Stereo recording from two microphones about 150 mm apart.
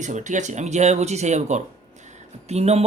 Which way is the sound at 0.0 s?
55° right (ahead or behind).